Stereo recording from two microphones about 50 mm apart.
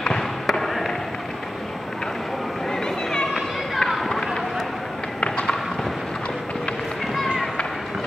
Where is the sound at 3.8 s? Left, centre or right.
Centre.